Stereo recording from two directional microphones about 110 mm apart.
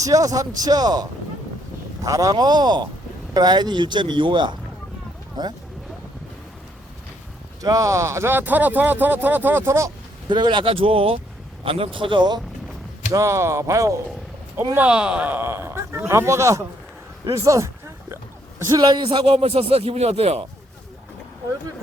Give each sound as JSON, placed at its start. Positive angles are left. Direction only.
{"t": 0.0, "sound": "a man's voice", "side_deg": -30}
{"t": 2.0, "sound": "a man's voice", "side_deg": -30}
{"t": 7.6, "sound": "speech", "side_deg": -30}
{"t": 10.2, "sound": "speech", "side_deg": -45}
{"t": 13.1, "sound": "speech", "side_deg": -30}
{"t": 14.8, "sound": "speech", "side_deg": -10}
{"t": 18.7, "sound": "speech", "side_deg": -40}
{"t": 19.2, "sound": "speech", "side_deg": -65}